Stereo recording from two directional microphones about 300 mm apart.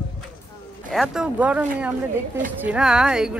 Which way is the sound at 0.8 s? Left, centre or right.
Centre.